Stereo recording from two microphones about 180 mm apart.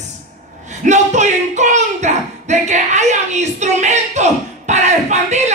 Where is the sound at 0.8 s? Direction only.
40° right (ahead or behind).